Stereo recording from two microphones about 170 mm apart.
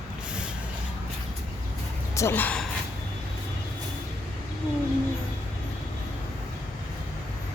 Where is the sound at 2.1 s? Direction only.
15° left (ahead or behind).